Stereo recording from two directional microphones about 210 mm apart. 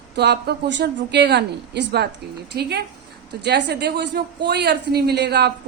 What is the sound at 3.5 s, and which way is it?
A woman's voice, 55° right (ahead or behind).